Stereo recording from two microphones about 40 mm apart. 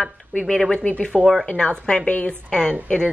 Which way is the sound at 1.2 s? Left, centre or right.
Centre.